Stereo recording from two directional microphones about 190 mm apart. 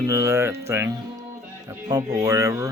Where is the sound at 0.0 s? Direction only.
15° right (ahead or behind).